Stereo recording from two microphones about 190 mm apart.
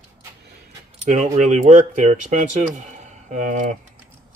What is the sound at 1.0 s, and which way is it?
Speech, 40° right (ahead or behind).